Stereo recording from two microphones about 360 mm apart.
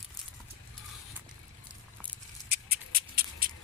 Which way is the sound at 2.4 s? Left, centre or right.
Right.